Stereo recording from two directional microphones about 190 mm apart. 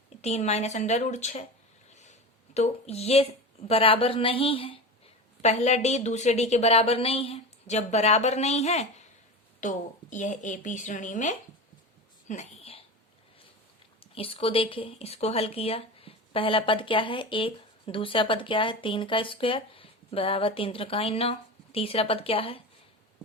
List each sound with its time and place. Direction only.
0.2 s a woman's voice: 35° left (ahead or behind)
2.6 s a woman's voice: 35° left (ahead or behind)
14.0 s speech: 30° left (ahead or behind)